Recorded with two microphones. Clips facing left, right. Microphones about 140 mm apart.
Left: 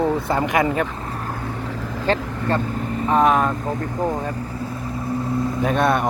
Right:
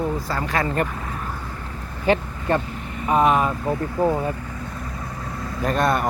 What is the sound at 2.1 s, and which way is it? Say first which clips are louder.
Speech: right 1 dB; 15° right (ahead or behind).